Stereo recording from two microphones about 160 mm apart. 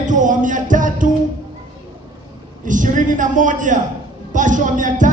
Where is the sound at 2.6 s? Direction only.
55° right (ahead or behind).